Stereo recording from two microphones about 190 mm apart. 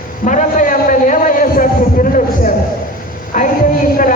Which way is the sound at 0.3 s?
45° left (ahead or behind).